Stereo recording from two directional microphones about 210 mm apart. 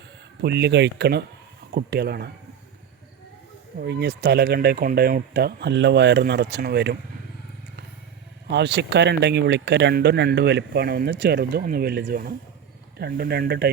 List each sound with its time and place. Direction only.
0.4 s speech: 55° right (ahead or behind)
3.8 s speech: 50° right (ahead or behind)
8.4 s speech: 55° right (ahead or behind)